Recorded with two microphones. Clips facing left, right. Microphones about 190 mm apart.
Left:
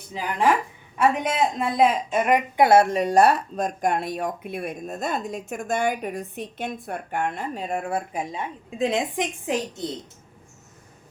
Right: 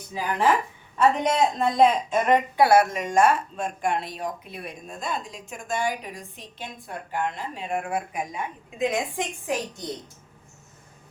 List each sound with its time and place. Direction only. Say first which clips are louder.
0.1 s speech: left 1 dB; 20° left (ahead or behind)
0.9 s a woman's voice: right 1 dB; 10° left (ahead or behind)
2.6 s speech: left 4 dB; 25° left (ahead or behind)